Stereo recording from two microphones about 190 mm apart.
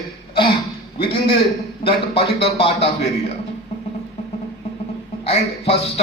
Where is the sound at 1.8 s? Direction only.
30° left (ahead or behind).